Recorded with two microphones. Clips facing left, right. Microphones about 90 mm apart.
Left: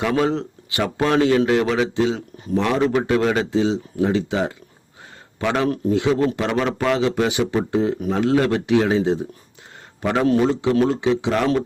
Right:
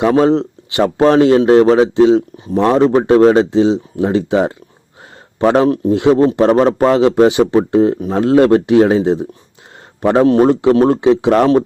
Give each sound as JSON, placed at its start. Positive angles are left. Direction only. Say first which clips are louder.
{"t": 0.0, "sound": "a man's voice", "louder": "right 9 dB", "side_deg": -35}
{"t": 10.4, "sound": "speech", "louder": "right 8 dB", "side_deg": -55}
{"t": 11.3, "sound": "speech", "louder": "right 10 dB", "side_deg": -40}